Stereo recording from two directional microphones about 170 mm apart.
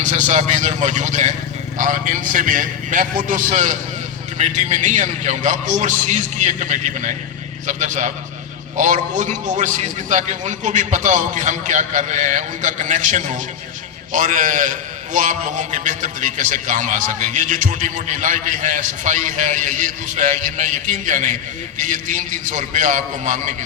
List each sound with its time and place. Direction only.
0.0 s a man's voice: 45° right (ahead or behind)